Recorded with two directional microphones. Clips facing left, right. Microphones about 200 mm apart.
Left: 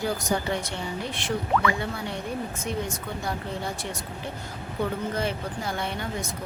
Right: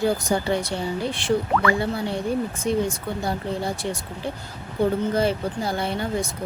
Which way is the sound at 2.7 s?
30° right (ahead or behind).